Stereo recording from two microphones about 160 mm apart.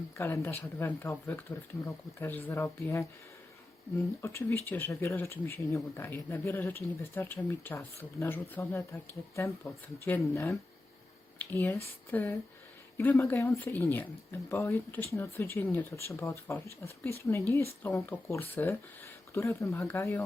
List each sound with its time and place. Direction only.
0.2 s speech: 15° left (ahead or behind)
4.2 s speech: 15° left (ahead or behind)